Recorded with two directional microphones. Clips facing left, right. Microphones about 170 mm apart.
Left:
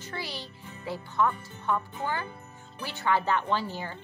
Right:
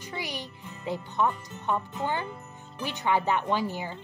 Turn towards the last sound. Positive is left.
turn(degrees=-15)  # may be behind; listen again after turning